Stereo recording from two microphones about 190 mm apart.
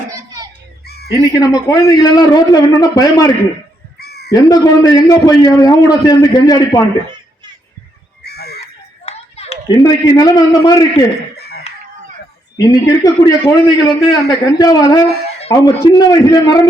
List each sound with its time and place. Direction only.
0.9 s crow: 55° left (ahead or behind)
1.2 s a man's voice: 20° left (ahead or behind)
4.0 s crow: 55° left (ahead or behind)
4.3 s a man's voice: 20° left (ahead or behind)
8.2 s chicken: 55° left (ahead or behind)
9.0 s a sound: 35° left (ahead or behind)
9.6 s a man's voice: 20° left (ahead or behind)
11.3 s chicken: 60° left (ahead or behind)
12.5 s a man's voice: 20° left (ahead or behind)